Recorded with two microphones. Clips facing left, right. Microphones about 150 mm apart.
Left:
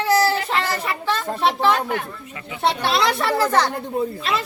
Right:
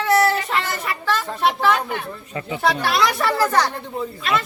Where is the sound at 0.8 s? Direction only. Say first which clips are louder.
Even; 30° left (ahead or behind).